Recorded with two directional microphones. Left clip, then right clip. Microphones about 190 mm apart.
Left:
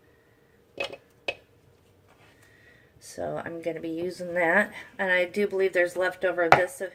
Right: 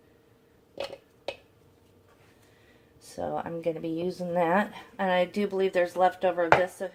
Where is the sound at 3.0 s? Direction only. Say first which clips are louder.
Even; 20° right (ahead or behind).